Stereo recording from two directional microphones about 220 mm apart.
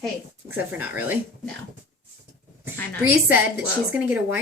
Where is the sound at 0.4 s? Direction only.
10° right (ahead or behind).